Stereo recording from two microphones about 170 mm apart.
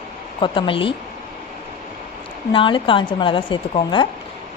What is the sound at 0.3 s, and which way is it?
Speech, 30° left (ahead or behind).